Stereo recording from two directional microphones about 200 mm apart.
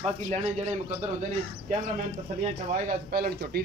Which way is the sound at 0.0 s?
35° right (ahead or behind).